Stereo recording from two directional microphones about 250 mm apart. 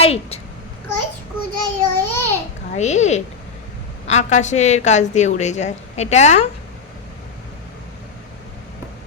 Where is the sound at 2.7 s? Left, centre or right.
Left.